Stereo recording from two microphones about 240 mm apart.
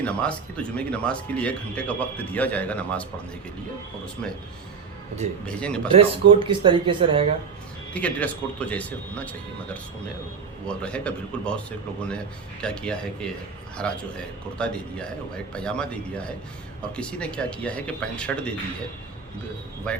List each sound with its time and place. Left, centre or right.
0.0 s speech: centre
5.5 s speech: centre
6.0 s speech: centre
7.9 s speech: centre
12.6 s speech: centre
19.9 s speech: centre